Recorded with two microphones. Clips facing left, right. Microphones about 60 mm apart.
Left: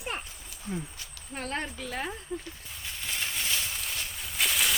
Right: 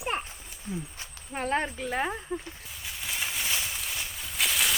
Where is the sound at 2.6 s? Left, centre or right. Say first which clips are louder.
Right 1 dB; centre.